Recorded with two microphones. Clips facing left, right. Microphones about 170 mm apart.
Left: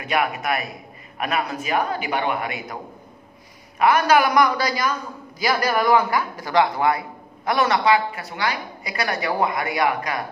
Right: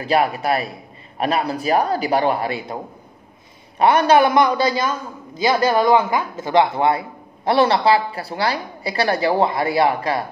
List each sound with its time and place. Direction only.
0.0 s a man's voice: 30° right (ahead or behind)